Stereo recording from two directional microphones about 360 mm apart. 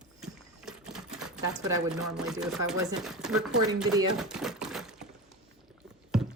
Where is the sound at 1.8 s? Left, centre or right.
Centre.